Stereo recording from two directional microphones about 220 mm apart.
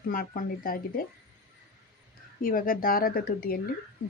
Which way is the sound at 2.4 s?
40° left (ahead or behind).